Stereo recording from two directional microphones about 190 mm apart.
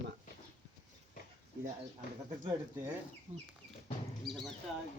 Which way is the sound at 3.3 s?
30° right (ahead or behind).